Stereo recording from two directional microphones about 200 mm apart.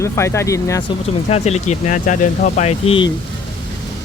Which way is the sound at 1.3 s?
35° left (ahead or behind).